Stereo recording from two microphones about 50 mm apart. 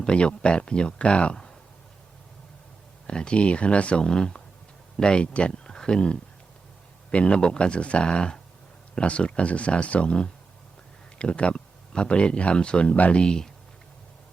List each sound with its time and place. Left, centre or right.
0.0 s speech: left
3.1 s speech: centre